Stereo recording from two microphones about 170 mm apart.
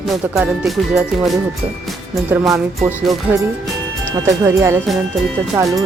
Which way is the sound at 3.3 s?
10° right (ahead or behind).